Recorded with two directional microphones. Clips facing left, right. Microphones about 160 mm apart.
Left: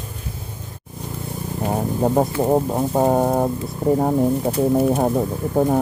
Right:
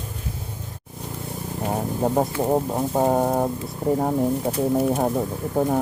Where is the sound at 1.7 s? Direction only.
20° left (ahead or behind).